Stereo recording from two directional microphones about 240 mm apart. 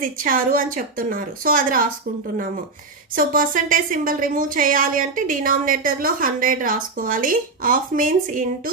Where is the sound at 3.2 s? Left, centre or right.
Right.